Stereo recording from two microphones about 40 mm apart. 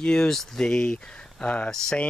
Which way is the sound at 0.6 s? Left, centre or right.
Centre.